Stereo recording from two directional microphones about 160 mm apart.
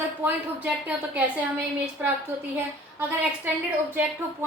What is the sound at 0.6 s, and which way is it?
Speech, 10° right (ahead or behind).